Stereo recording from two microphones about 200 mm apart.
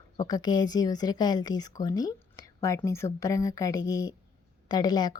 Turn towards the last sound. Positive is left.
turn(degrees=20)  # may be behind; listen again after turning